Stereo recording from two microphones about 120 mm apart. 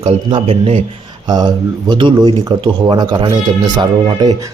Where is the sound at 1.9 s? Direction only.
40° right (ahead or behind).